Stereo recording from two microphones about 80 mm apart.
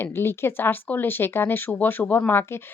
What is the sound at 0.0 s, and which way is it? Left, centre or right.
Speech, left.